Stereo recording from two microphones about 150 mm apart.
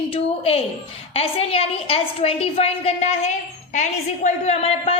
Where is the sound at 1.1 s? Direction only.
40° left (ahead or behind).